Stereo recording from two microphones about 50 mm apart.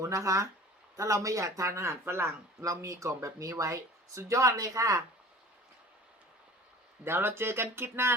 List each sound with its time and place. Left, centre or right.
0.0 s speech: right
7.0 s speech: right